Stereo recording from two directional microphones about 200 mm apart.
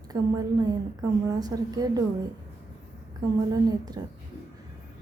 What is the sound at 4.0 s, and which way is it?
Speech, 20° right (ahead or behind).